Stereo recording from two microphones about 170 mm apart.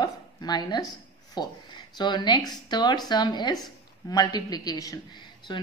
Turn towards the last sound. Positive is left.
turn(degrees=25)  # may be behind; listen again after turning